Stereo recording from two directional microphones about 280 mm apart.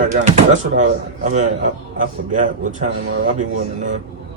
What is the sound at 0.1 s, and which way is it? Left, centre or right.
A man's voice, right.